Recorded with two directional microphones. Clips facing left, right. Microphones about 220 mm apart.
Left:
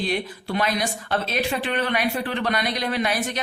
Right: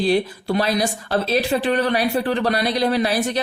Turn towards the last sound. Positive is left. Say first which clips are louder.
# right 5 dB
turn(degrees=-35)  # may be behind; listen again after turning